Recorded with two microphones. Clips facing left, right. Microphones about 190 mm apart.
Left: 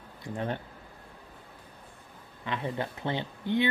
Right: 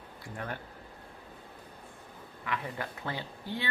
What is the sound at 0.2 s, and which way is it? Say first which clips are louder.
Speech: left 6 dB; 25° left (ahead or behind).